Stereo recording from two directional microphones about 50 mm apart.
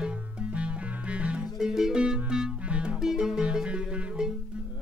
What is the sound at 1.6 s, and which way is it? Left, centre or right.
Music, centre.